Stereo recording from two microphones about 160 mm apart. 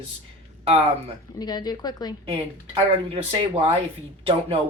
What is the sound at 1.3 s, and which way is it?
Speech, 25° left (ahead or behind).